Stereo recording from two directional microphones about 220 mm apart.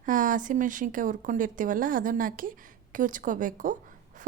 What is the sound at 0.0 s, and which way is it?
A woman's voice, 35° right (ahead or behind).